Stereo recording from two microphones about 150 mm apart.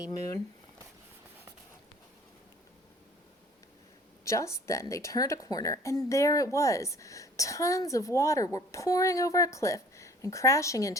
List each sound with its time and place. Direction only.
4.2 s a woman's voice: 20° left (ahead or behind)